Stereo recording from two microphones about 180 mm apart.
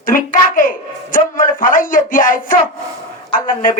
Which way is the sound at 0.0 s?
50° left (ahead or behind).